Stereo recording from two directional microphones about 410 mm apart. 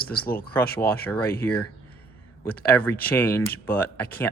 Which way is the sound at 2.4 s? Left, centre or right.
Centre.